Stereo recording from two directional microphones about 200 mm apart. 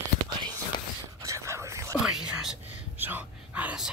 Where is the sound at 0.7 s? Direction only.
25° left (ahead or behind).